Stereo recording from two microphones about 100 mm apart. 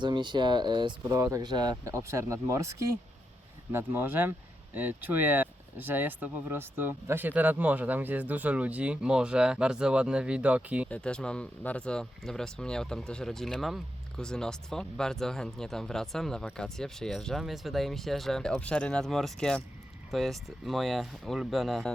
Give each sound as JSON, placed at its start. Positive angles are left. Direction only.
{"t": 0.0, "sound": "speech", "side_deg": -50}
{"t": 1.0, "sound": "speech", "side_deg": -30}
{"t": 1.5, "sound": "speech", "side_deg": -45}
{"t": 1.8, "sound": "speech", "side_deg": -30}
{"t": 10.8, "sound": "speech", "side_deg": 10}